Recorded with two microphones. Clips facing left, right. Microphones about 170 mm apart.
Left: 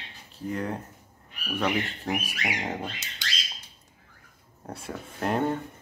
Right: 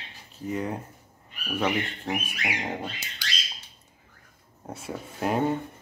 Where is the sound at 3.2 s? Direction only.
20° left (ahead or behind).